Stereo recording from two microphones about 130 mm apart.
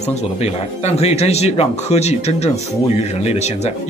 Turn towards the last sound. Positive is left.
turn(degrees=55)  # may be behind; listen again after turning